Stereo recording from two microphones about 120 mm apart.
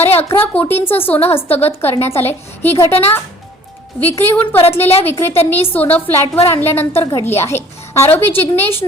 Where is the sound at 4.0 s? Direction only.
15° left (ahead or behind).